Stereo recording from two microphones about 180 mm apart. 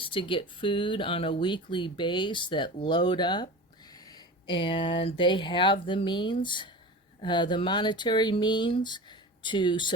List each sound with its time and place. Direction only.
0.0 s speech: 30° left (ahead or behind)